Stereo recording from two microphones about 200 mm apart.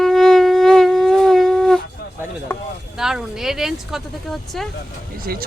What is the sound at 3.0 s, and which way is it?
Speech, centre (ahead or behind).